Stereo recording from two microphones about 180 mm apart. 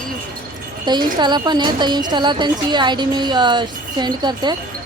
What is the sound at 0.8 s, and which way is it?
A woman's voice, 25° right (ahead or behind).